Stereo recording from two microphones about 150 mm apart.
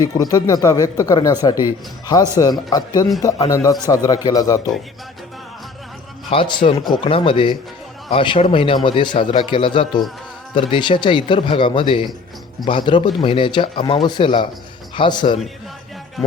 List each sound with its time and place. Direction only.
0.0 s speech: 25° left (ahead or behind)
6.3 s a man's voice: 35° left (ahead or behind)